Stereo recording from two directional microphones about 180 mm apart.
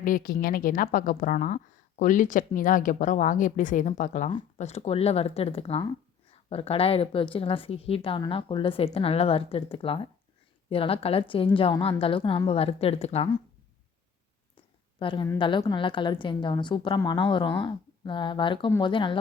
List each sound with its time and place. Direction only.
0.0 s a woman's voice: 50° left (ahead or behind); by 13.2 s 35° left (ahead or behind)
14.5 s a sound: 30° left (ahead or behind)
15.4 s speech: 25° left (ahead or behind)